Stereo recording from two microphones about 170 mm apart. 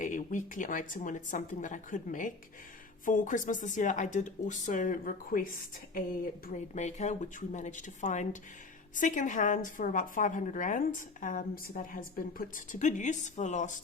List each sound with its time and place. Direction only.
0.0 s a woman's voice: 50° left (ahead or behind)
6.5 s a woman's voice: 45° left (ahead or behind)